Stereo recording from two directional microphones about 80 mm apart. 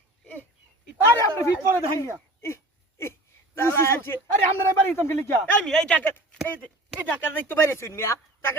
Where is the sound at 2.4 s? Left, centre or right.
Left.